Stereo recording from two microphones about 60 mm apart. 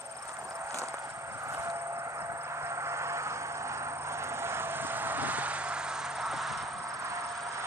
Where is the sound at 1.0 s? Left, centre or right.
Right; by 6.6 s centre.